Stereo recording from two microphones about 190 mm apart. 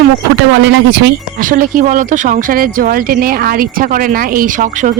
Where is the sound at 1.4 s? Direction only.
45° right (ahead or behind).